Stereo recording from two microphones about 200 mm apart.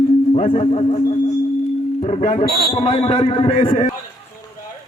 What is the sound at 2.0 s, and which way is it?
Speech, 35° left (ahead or behind).